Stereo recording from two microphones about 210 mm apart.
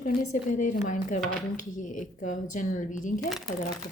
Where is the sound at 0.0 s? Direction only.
40° left (ahead or behind).